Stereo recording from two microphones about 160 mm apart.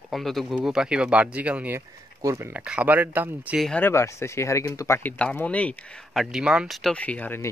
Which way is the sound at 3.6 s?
5° left (ahead or behind).